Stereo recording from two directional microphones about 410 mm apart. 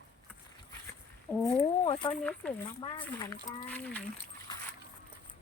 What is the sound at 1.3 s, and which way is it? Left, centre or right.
Speech, centre.